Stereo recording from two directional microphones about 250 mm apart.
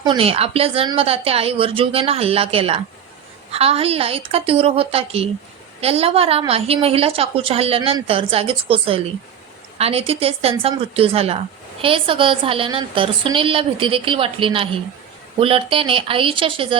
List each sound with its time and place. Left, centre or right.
0.0 s a woman's voice: right